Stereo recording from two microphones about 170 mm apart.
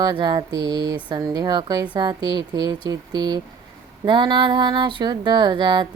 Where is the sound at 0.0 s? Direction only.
25° right (ahead or behind).